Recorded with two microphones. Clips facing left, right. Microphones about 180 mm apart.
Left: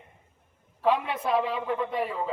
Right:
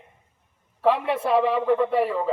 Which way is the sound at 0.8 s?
75° right (ahead or behind).